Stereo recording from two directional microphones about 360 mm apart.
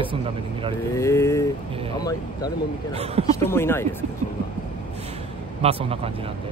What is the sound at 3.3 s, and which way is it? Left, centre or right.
Speech, centre.